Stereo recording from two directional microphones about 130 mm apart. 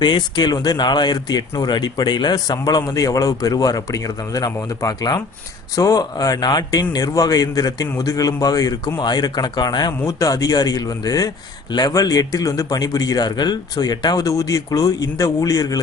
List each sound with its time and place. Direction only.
0.0 s a man's voice: 35° left (ahead or behind)